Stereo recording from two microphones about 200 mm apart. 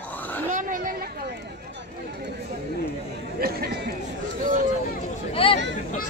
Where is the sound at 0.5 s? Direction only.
40° right (ahead or behind).